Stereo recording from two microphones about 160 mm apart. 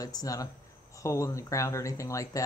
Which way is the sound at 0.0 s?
20° left (ahead or behind).